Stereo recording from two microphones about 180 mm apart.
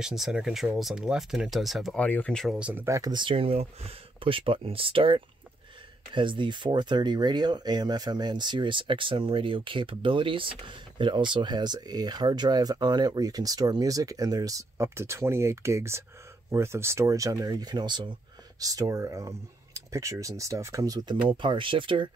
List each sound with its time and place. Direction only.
0.0 s speech: centre (ahead or behind); by 22.1 s 30° right (ahead or behind)